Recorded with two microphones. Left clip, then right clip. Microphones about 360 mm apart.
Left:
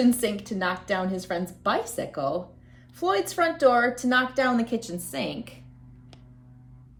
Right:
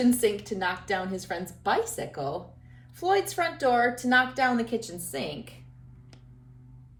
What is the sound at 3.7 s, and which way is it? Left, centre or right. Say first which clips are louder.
Speech: even; centre.